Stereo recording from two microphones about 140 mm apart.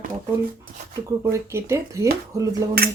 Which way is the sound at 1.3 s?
20° right (ahead or behind).